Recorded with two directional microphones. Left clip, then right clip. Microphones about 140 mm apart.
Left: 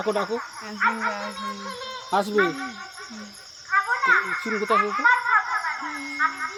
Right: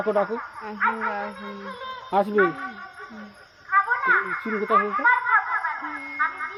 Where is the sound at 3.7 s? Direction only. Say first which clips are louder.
Even; 35° left (ahead or behind).